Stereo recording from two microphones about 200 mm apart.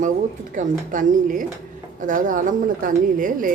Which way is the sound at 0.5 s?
40° right (ahead or behind).